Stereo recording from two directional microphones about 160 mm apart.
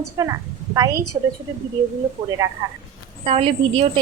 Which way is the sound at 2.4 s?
20° right (ahead or behind).